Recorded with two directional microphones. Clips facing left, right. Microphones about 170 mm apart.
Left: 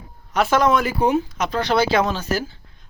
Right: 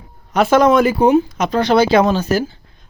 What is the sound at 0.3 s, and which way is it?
Speech, 20° right (ahead or behind).